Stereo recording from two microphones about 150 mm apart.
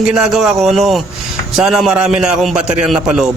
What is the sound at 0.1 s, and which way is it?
A man's voice, centre (ahead or behind).